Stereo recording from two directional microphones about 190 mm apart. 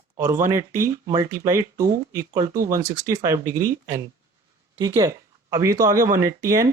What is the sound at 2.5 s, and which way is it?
Speech, 45° right (ahead or behind).